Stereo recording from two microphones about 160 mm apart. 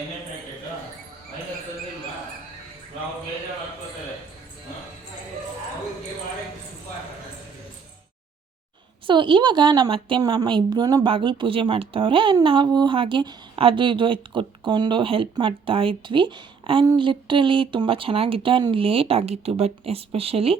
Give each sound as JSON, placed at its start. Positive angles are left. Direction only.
{"t": 9.0, "sound": "a woman's voice", "side_deg": -30}